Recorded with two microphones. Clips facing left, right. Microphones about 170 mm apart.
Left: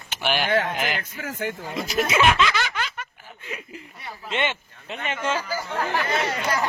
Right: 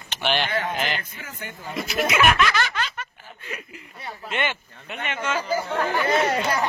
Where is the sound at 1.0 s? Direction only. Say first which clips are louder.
Left 8 dB; 90° left.